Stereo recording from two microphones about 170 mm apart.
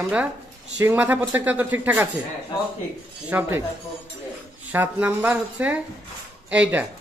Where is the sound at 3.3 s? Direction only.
10° right (ahead or behind).